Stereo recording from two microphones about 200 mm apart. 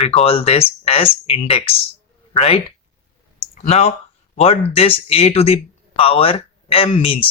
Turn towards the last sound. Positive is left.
turn(degrees=25)  # may be behind; listen again after turning